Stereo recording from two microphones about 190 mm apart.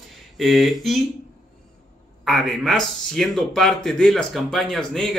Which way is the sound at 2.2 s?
Centre (ahead or behind).